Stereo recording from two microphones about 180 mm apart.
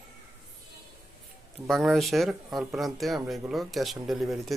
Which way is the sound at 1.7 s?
Centre (ahead or behind).